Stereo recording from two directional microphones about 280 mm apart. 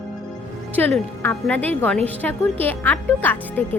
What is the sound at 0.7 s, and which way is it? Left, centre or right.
Speech, centre.